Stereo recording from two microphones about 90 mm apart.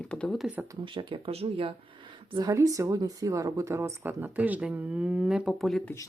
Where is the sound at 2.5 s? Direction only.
35° right (ahead or behind).